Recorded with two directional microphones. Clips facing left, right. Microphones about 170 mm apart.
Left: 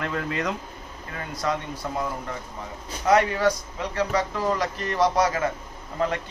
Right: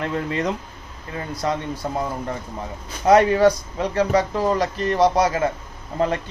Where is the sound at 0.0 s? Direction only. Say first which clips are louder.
Right 4 dB; 30° right (ahead or behind).